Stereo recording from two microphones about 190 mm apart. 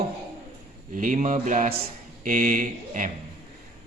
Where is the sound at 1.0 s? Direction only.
40° right (ahead or behind).